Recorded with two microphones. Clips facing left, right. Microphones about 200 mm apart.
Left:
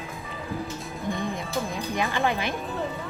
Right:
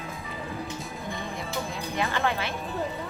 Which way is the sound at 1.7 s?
15° left (ahead or behind).